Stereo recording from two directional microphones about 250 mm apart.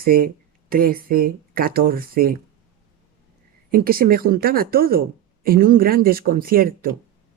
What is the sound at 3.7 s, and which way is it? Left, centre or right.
Speech, right.